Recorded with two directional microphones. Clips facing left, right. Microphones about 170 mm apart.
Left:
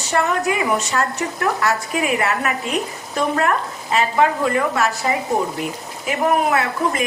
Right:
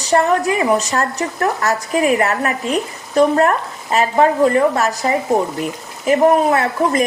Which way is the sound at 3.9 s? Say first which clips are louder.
Right 3 dB; 40° right (ahead or behind).